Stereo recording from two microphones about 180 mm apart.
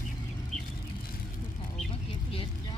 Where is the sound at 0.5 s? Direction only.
35° right (ahead or behind).